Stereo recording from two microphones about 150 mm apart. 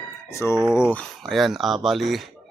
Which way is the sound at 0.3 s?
20° left (ahead or behind).